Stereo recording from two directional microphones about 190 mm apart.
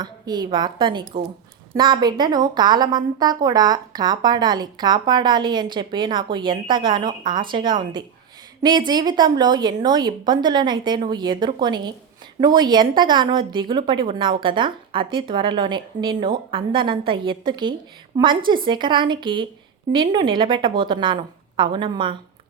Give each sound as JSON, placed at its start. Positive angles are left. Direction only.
{"t": 0.0, "sound": "a woman's voice", "side_deg": -20}